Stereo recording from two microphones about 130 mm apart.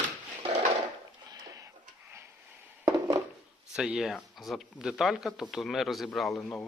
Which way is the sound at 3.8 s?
5° right (ahead or behind).